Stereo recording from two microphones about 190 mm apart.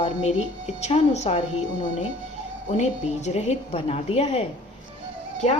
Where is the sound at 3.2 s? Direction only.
35° left (ahead or behind).